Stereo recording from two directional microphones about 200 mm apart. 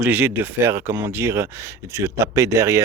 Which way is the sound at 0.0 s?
10° right (ahead or behind).